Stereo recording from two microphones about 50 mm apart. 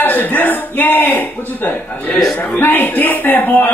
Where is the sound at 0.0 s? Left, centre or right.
Left.